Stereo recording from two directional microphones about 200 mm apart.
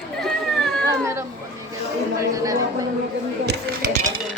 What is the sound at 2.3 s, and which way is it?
Speech, 15° right (ahead or behind).